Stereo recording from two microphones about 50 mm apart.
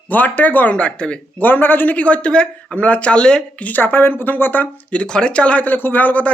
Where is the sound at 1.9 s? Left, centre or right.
Left.